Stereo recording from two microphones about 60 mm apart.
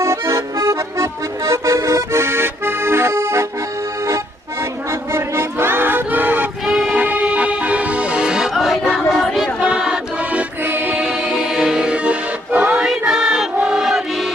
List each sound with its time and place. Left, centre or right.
0.0 s accordion: right
4.9 s a sound: right
6.7 s music: centre
6.9 s music: right
10.6 s music: right
10.9 s music: centre; by 12.8 s right
12.8 s music: centre